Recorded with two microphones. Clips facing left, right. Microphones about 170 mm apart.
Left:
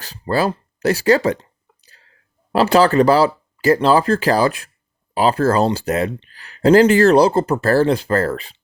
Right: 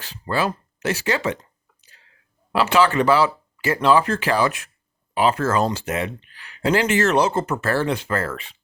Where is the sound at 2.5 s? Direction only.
40° left (ahead or behind).